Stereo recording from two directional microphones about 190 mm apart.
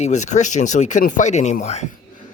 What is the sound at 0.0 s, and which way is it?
Speech, 40° left (ahead or behind).